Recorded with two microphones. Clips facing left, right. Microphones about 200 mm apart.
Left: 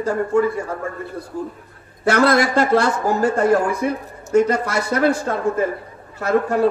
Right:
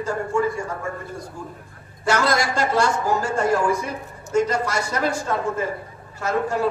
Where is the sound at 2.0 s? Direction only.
60° left (ahead or behind).